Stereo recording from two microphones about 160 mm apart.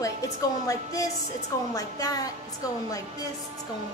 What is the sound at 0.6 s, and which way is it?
A woman's voice, 20° left (ahead or behind).